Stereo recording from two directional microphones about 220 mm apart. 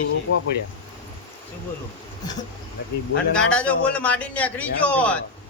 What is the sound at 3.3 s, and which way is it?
A man's voice, 5° left (ahead or behind).